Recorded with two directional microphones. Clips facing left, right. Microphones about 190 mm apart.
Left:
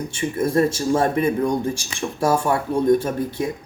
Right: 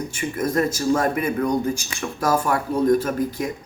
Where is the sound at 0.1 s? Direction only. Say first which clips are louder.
Left 4 dB; 25° left (ahead or behind).